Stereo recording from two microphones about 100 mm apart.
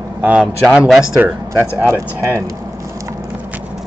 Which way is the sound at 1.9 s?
30° right (ahead or behind).